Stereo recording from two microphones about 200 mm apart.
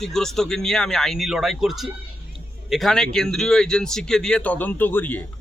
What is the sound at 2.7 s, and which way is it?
Speech, centre (ahead or behind).